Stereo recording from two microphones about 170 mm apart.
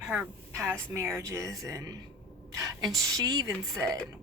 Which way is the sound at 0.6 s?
15° right (ahead or behind).